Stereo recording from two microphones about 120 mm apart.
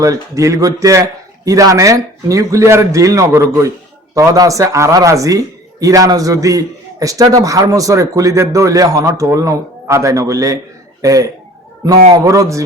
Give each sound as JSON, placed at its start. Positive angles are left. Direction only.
{"t": 0.0, "sound": "a man's voice", "side_deg": -25}